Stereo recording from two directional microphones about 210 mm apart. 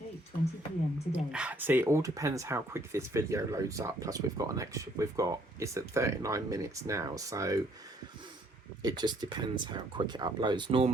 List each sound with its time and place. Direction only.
1.1 s speech: 5° right (ahead or behind)
8.8 s speech: 20° right (ahead or behind)